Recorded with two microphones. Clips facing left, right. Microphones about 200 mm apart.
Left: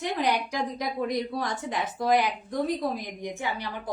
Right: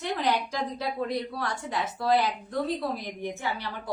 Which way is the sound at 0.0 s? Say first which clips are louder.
Left 1 dB; 15° left (ahead or behind).